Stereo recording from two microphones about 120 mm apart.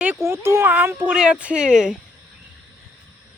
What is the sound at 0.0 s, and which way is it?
Speech, 15° right (ahead or behind).